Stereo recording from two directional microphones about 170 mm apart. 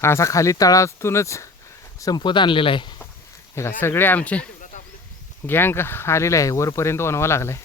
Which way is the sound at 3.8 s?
10° left (ahead or behind).